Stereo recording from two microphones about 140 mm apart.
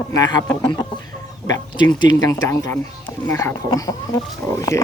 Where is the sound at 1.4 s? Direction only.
30° left (ahead or behind).